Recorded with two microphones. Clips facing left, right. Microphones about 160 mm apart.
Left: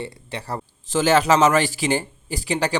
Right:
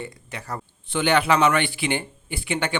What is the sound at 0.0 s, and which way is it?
Speech, 30° left (ahead or behind).